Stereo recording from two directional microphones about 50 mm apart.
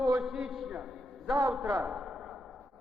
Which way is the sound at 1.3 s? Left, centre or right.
Right.